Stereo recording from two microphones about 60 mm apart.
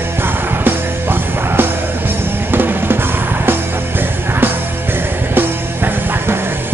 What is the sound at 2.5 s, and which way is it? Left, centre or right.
Drum kit, right.